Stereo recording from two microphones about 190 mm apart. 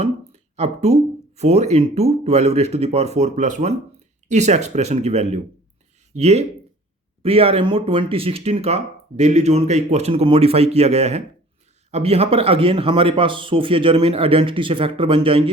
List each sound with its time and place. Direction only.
0.5 s speech: 35° right (ahead or behind)